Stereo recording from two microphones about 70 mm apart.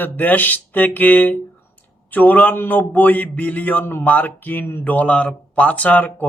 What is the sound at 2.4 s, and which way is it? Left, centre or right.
A man's voice, left.